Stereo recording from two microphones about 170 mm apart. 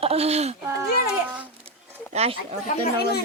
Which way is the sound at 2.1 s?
35° right (ahead or behind).